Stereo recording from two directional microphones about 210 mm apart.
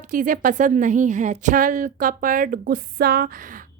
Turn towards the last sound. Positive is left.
turn(degrees=-45)  # may be behind; listen again after turning